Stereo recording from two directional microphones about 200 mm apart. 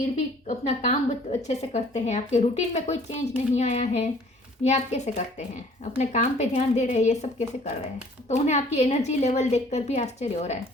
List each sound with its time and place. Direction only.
0.4 s a woman's voice: 35° left (ahead or behind)